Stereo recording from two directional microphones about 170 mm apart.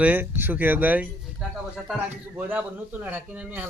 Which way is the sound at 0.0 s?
10° right (ahead or behind).